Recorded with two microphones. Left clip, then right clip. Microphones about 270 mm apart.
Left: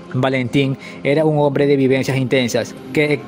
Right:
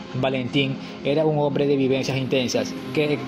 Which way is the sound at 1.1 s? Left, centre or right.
Left.